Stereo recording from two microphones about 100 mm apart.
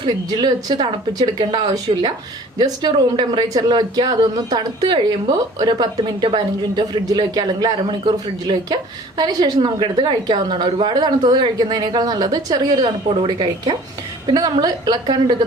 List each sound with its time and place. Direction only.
0.0 s a woman's voice: 45° right (ahead or behind)
13.1 s a woman's voice: 55° right (ahead or behind)
14.3 s a woman's voice: 40° right (ahead or behind)